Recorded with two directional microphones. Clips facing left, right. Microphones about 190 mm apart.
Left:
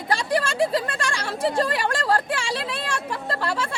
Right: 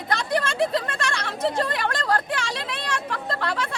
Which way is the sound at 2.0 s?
30° left (ahead or behind).